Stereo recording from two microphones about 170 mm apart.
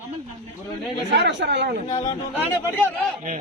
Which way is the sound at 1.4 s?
90° right.